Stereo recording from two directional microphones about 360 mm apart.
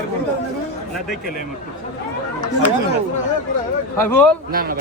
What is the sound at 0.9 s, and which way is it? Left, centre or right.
Speech, centre.